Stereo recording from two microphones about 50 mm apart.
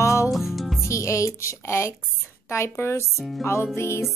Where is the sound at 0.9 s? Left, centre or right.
Left.